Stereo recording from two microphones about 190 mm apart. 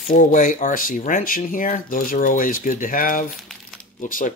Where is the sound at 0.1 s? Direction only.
45° left (ahead or behind).